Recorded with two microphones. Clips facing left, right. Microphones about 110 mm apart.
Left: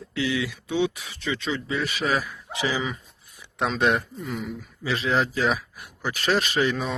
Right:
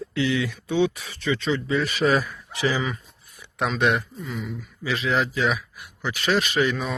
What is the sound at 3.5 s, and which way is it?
Speech, 30° left (ahead or behind).